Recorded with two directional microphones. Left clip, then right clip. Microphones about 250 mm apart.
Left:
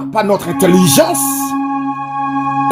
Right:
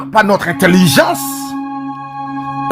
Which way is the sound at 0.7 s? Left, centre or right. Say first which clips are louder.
Left 1 dB; right.